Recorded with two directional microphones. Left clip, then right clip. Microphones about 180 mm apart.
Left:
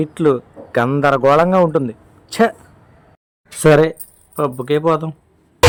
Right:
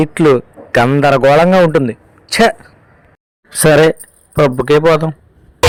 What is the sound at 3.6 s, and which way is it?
A man's voice, 35° right (ahead or behind).